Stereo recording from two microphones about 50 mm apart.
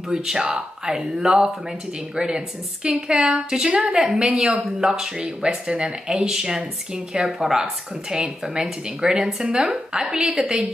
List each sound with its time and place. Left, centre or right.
0.1 s a woman's voice: centre
10.0 s a woman's voice: right